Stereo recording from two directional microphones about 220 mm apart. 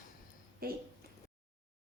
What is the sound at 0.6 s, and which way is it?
Speech, 40° right (ahead or behind).